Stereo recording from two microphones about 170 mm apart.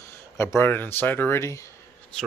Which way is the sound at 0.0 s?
15° left (ahead or behind).